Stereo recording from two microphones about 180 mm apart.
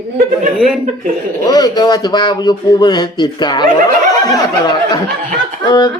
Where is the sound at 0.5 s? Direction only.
5° right (ahead or behind).